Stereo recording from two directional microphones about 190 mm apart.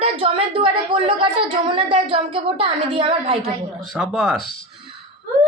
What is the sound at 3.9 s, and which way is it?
Speech, 5° right (ahead or behind).